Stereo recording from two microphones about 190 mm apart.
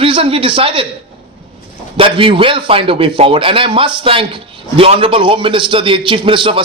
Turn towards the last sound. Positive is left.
turn(degrees=-25)  # may be behind; listen again after turning